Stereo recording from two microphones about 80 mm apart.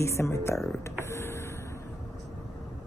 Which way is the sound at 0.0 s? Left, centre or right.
Left.